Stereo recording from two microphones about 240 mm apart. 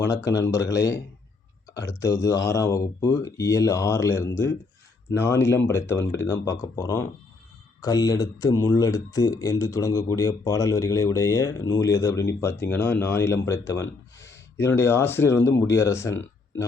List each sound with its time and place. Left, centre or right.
0.0 s speech: centre
0.4 s speech: left
1.7 s speech: centre